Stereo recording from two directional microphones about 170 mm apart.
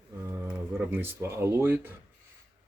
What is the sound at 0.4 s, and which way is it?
Speech, 10° right (ahead or behind).